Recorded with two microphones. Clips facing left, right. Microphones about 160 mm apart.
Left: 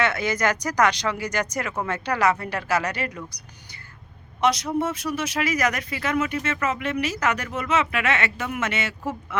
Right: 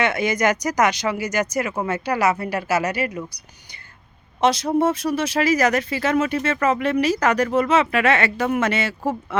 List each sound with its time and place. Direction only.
0.0 s speech: 15° right (ahead or behind)
4.4 s speech: 30° right (ahead or behind)